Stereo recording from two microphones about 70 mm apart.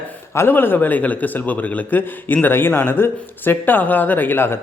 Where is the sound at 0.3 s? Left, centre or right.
Left.